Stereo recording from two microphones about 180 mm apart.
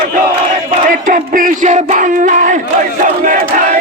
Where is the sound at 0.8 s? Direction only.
45° right (ahead or behind).